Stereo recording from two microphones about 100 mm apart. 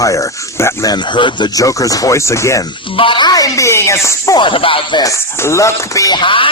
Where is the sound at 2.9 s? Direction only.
55° left (ahead or behind).